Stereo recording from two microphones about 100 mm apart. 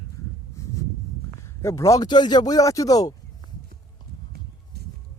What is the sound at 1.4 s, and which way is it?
Speech, 30° left (ahead or behind).